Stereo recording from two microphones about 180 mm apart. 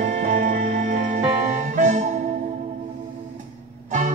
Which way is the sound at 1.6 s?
40° right (ahead or behind).